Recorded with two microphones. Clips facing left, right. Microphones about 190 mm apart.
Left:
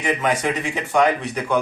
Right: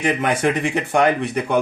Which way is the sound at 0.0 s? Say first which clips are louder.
Right 2 dB; 60° right (ahead or behind).